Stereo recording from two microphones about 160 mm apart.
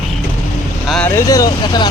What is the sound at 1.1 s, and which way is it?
Speech, 20° left (ahead or behind).